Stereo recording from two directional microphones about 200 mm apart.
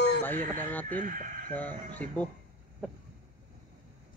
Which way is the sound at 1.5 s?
10° left (ahead or behind).